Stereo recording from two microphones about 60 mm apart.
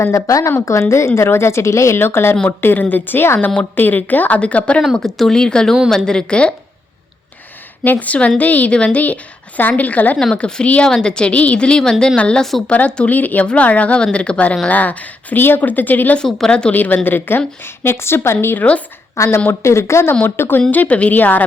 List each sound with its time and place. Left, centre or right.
0.0 s a woman's voice: left
2.0 s a woman's voice: left
4.9 s a woman's voice: centre
7.9 s a woman's voice: left
12.4 s speech: centre
12.6 s speech: left
16.1 s a woman's voice: centre
16.7 s a woman's voice: left
19.1 s a woman's voice: left
20.2 s a woman's voice: left
20.6 s speech: left